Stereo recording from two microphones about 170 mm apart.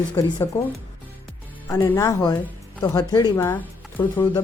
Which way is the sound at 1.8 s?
20° left (ahead or behind).